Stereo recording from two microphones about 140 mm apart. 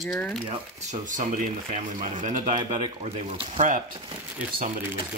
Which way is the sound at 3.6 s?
70° right (ahead or behind).